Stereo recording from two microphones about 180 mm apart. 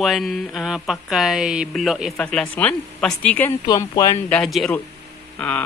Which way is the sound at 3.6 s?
20° left (ahead or behind).